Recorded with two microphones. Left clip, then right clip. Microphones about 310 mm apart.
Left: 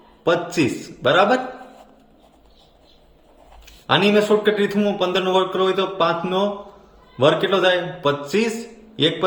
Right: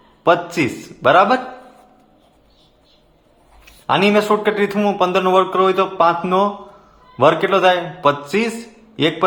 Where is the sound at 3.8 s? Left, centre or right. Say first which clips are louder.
Right 2 dB; centre.